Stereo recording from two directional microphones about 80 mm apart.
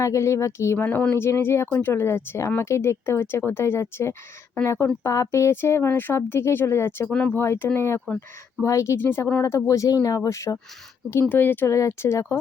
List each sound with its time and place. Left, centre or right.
0.0 s speech: left
7.1 s speech: centre
7.3 s speech: left
9.0 s speech: left
11.1 s speech: left
11.7 s speech: left